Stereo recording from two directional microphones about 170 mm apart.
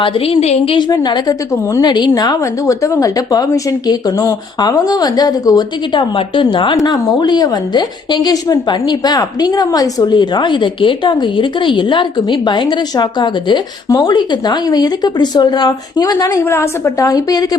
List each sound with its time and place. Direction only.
0.0 s a woman's voice: 35° left (ahead or behind)